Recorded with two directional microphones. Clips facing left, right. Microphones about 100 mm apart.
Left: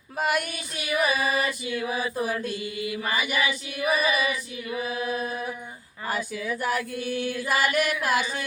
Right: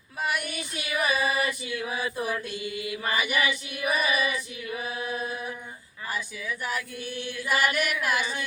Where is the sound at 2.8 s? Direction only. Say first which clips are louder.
Left 1 dB; 25° left (ahead or behind).